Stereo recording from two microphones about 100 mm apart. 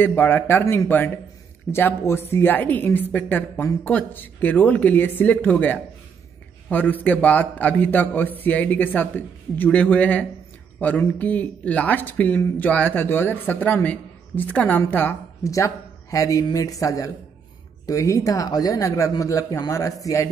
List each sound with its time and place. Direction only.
0.0 s a woman's voice: 20° left (ahead or behind)
15.4 s speech: 30° left (ahead or behind)